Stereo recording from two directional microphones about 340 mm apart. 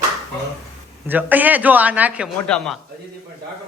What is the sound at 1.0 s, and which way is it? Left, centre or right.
A man's voice, centre.